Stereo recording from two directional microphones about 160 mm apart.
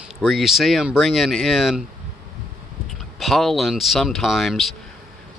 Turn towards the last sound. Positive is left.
turn(degrees=0)  # may be behind; listen again after turning